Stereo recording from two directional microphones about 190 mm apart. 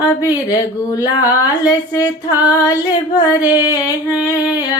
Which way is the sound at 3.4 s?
10° right (ahead or behind).